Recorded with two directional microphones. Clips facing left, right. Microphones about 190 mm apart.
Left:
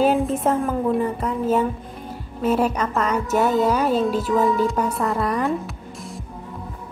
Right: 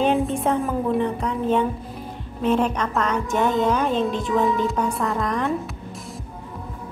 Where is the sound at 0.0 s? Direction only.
5° left (ahead or behind).